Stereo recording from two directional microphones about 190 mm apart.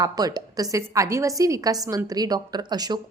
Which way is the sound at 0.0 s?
20° right (ahead or behind).